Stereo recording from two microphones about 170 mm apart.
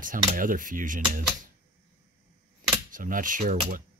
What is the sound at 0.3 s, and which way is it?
Speech, 50° right (ahead or behind).